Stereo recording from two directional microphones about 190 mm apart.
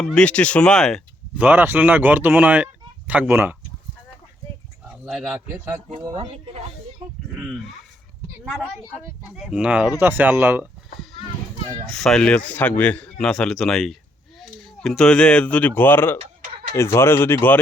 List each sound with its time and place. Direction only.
0.0 s speech: 5° left (ahead or behind)
1.4 s speech: 10° right (ahead or behind)
5.0 s speech: 5° right (ahead or behind)
6.1 s speech: 30° right (ahead or behind)
7.3 s speech: centre (ahead or behind)
11.9 s speech: centre (ahead or behind)